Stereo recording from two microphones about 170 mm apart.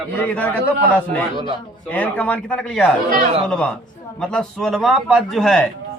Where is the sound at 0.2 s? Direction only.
10° left (ahead or behind).